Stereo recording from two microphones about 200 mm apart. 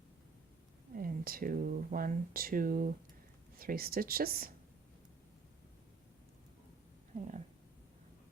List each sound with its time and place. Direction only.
0.9 s speech: 45° right (ahead or behind)
7.2 s speech: 35° right (ahead or behind)